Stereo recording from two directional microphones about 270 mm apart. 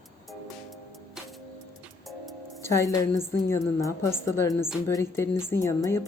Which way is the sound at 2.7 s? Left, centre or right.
Centre.